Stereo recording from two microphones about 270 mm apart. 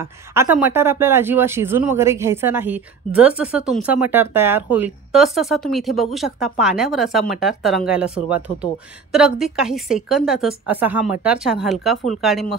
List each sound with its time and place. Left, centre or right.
0.0 s speech: centre